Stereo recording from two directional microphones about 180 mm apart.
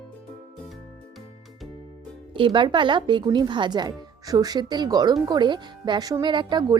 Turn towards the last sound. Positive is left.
turn(degrees=-25)  # may be behind; listen again after turning